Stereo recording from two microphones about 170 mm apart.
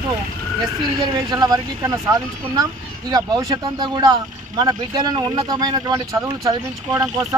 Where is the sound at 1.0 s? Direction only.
25° right (ahead or behind).